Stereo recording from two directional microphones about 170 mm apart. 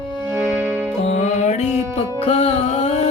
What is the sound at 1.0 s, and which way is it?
Music, 40° left (ahead or behind).